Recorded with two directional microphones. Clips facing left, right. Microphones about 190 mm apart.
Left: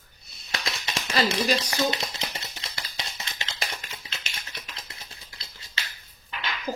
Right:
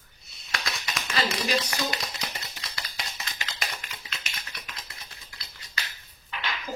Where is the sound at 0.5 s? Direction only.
25° left (ahead or behind).